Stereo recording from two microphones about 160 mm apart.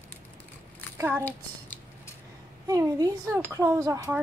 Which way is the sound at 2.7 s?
20° right (ahead or behind).